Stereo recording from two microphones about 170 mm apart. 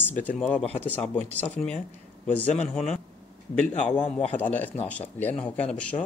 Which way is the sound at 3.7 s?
45° left (ahead or behind).